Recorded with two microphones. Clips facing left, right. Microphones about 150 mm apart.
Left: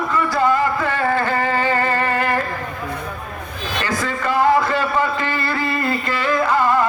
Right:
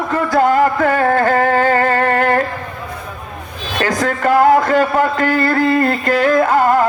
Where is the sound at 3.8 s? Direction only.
50° right (ahead or behind).